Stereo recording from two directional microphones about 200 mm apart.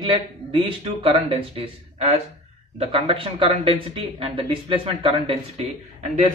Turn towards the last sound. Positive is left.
turn(degrees=-35)  # may be behind; listen again after turning